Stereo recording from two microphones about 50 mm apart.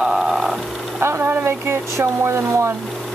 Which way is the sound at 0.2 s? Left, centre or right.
Centre.